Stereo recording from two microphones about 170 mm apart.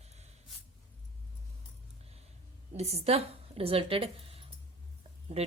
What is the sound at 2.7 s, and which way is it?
A woman's voice, 40° right (ahead or behind).